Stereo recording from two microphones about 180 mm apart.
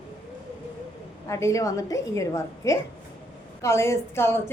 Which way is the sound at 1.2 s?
15° left (ahead or behind).